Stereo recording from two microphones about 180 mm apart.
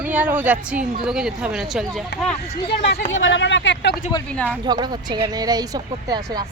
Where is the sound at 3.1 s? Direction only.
90° left.